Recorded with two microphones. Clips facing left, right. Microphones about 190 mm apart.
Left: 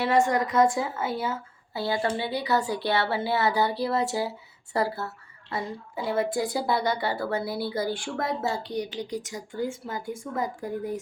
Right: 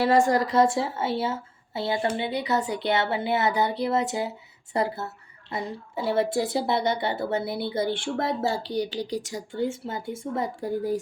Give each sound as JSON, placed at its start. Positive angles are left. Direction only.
{"t": 0.0, "sound": "a woman's voice", "side_deg": -35}